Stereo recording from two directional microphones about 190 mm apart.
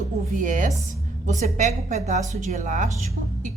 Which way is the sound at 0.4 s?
45° right (ahead or behind).